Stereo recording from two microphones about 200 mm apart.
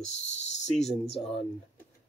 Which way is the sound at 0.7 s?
Centre (ahead or behind).